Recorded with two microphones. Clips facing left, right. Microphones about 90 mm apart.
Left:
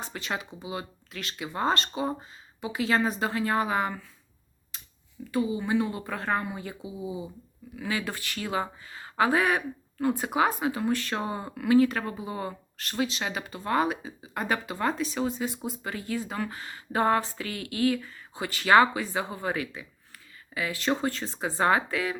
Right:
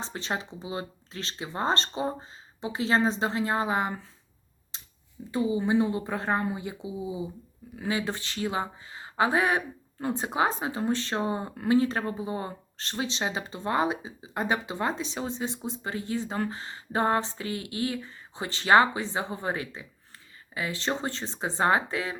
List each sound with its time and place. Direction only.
0.0 s speech: 30° right (ahead or behind)
4.7 s a sound: 25° right (ahead or behind)
5.3 s speech: 25° right (ahead or behind)